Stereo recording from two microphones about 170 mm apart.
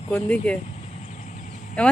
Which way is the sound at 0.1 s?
10° left (ahead or behind).